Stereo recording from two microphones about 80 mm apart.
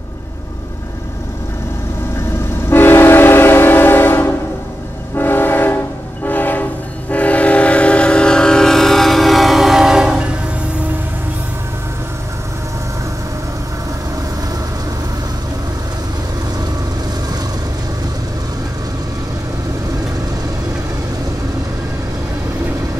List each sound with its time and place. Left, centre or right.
2.7 s train: left; by 10.2 s centre